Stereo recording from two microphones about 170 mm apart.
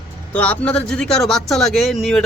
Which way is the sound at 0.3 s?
10° left (ahead or behind).